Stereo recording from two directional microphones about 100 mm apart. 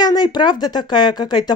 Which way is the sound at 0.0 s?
45° left (ahead or behind).